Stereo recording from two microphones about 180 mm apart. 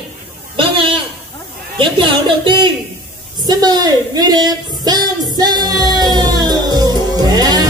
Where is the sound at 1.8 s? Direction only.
25° right (ahead or behind).